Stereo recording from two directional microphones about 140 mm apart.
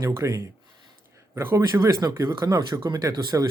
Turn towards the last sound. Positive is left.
turn(degrees=-25)  # may be behind; listen again after turning